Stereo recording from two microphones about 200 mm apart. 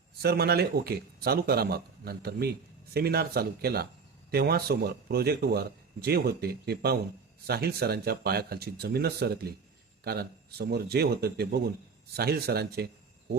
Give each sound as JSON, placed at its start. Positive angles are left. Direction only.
{"t": 0.2, "sound": "a man's voice", "side_deg": -50}